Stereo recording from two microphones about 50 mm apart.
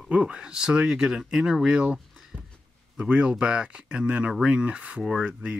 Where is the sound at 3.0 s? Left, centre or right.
Right.